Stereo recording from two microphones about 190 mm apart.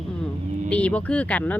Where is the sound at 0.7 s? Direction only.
5° left (ahead or behind).